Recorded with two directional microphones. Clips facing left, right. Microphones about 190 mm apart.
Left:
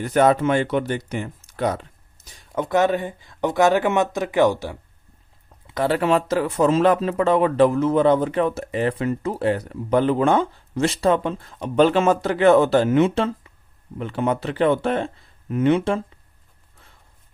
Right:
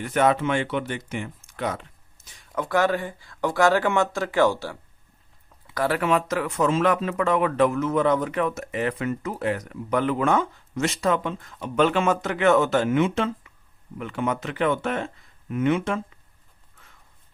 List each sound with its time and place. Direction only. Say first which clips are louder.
0.0 s speech: left 4 dB; 35° left (ahead or behind)
2.6 s speech: left 3 dB; 20° left (ahead or behind)